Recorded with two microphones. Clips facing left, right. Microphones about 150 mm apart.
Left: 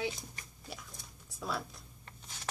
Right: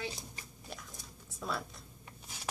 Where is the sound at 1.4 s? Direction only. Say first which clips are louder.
Even; centre (ahead or behind).